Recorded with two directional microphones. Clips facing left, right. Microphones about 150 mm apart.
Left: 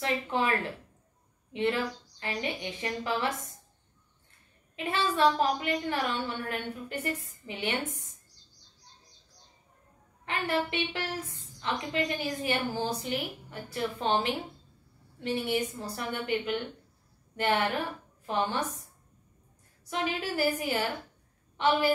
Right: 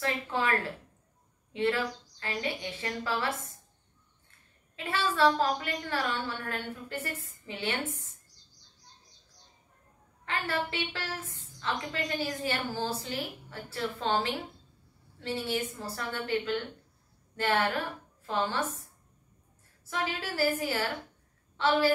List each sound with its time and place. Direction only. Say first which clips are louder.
0.0 s a woman's voice: left 2 dB; 20° left (ahead or behind)
4.7 s a woman's voice: left 1 dB; 15° left (ahead or behind)
10.2 s a woman's voice: left 2 dB; 15° left (ahead or behind)
19.9 s a woman's voice: left 2 dB; 20° left (ahead or behind)